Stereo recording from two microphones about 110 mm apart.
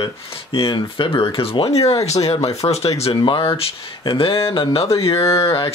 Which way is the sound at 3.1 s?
50° left (ahead or behind).